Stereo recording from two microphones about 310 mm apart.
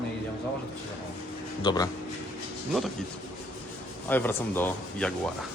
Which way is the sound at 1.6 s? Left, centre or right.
Centre.